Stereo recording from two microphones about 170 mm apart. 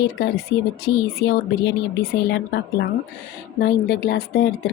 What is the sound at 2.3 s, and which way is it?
Speech, 80° left.